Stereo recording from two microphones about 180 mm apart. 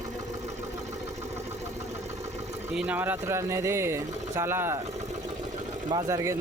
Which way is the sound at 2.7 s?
10° right (ahead or behind).